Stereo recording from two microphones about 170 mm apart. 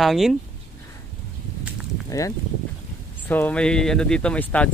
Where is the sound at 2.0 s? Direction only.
20° left (ahead or behind).